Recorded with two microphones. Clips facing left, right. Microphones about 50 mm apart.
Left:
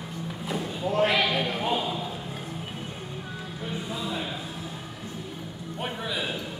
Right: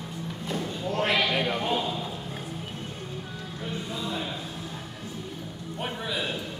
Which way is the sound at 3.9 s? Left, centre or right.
Centre.